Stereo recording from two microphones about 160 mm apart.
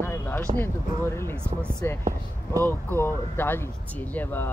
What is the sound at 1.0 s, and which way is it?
Speech, 15° left (ahead or behind).